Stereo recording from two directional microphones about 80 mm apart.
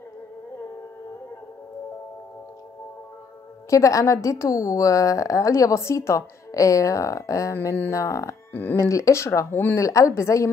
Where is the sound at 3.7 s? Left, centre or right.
Left.